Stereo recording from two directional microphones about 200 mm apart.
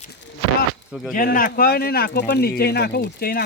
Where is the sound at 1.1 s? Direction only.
45° left (ahead or behind).